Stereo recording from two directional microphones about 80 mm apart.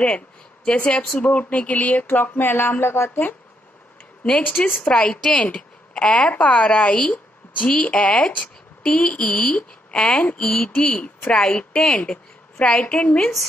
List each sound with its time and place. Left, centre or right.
0.7 s speech: centre
1.2 s a sound: centre
4.9 s speech: centre